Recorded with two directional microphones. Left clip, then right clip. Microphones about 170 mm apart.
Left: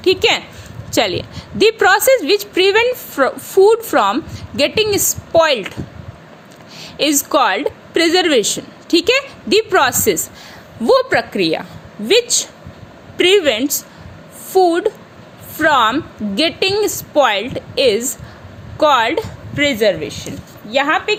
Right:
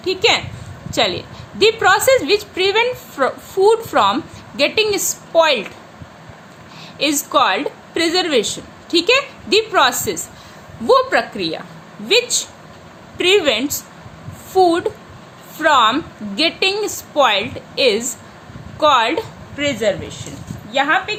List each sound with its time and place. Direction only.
0.0 s a woman's voice: 45° left (ahead or behind)
6.7 s a woman's voice: 40° left (ahead or behind)
19.5 s speech: 50° left (ahead or behind)